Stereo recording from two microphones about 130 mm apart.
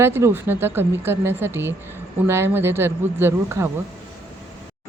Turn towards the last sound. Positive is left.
turn(degrees=-20)  # may be behind; listen again after turning